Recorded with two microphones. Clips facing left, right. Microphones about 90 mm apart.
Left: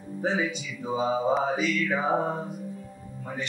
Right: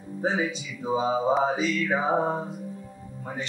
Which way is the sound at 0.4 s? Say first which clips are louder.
Right 1 dB; 30° right (ahead or behind).